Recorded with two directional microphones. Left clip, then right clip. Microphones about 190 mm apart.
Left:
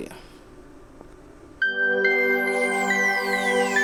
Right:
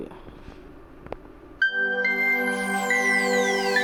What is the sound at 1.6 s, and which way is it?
Music, centre (ahead or behind).